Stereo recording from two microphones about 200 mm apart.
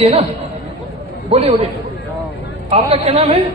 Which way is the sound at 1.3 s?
30° right (ahead or behind).